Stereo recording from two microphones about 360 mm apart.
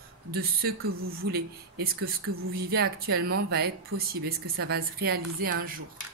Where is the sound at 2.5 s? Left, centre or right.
Right.